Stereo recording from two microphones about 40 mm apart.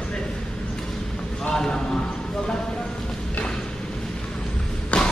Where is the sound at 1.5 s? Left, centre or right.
Centre.